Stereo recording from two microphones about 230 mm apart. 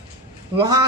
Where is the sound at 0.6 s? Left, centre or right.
Centre.